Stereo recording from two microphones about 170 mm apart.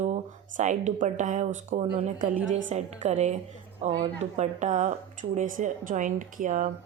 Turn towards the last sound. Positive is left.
turn(degrees=-55)  # may be behind; listen again after turning